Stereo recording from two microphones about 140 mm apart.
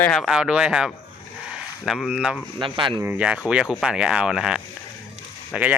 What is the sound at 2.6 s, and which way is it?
Speech, 35° right (ahead or behind).